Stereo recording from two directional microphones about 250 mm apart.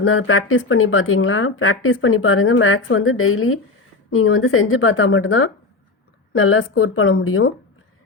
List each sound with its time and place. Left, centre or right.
0.0 s speech: left